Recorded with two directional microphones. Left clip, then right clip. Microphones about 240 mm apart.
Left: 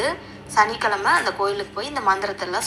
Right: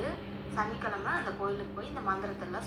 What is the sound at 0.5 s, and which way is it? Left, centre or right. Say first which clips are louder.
A woman's voice: left 15 dB; left.